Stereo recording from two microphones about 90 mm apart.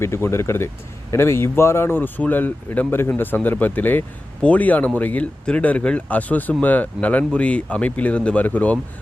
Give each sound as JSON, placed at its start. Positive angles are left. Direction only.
{"t": 0.0, "sound": "speech", "side_deg": 30}